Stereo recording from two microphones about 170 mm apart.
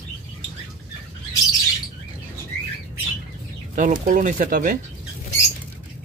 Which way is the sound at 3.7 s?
50° right (ahead or behind).